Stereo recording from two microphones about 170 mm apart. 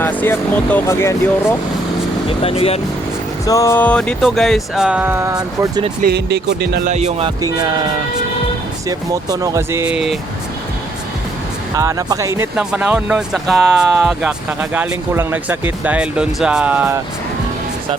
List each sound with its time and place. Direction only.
0.0 s speech: 10° left (ahead or behind)
2.4 s speech: 35° left (ahead or behind)
3.4 s speech: 20° left (ahead or behind); by 5.8 s 20° right (ahead or behind)
6.0 s speech: 70° right (ahead or behind)
6.8 s speech: 40° right (ahead or behind)
8.9 s speech: 20° right (ahead or behind); by 10.2 s 5° right (ahead or behind)
11.8 s speech: 20° right (ahead or behind)